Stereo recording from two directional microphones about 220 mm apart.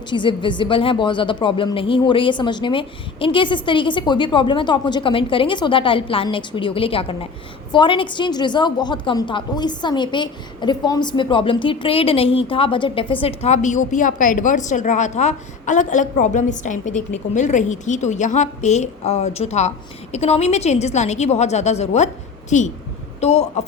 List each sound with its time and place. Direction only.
0.1 s a woman's voice: 20° left (ahead or behind)